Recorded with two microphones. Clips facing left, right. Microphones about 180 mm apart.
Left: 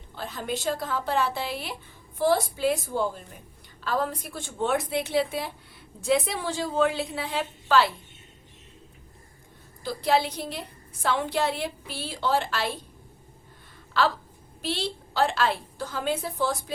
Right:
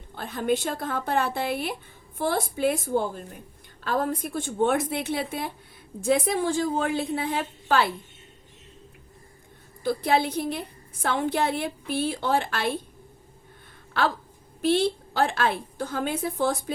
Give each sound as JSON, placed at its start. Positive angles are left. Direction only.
{"t": 0.2, "sound": "a woman's voice", "side_deg": -55}
{"t": 9.8, "sound": "a woman's voice", "side_deg": -55}
{"t": 14.6, "sound": "a woman's voice", "side_deg": -55}